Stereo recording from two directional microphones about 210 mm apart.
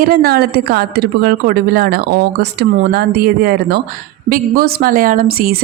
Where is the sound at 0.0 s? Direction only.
45° right (ahead or behind).